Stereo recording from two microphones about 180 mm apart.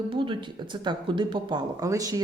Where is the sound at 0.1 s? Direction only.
30° right (ahead or behind).